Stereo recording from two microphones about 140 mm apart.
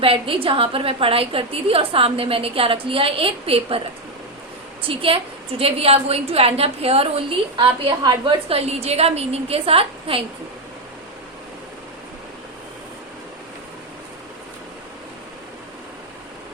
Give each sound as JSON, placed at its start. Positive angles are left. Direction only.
{"t": 0.0, "sound": "a woman's voice", "side_deg": -40}
{"t": 4.8, "sound": "a woman's voice", "side_deg": -40}
{"t": 8.4, "sound": "a woman's voice", "side_deg": -45}